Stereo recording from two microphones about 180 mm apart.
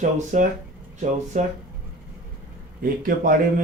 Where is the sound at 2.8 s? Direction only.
55° right (ahead or behind).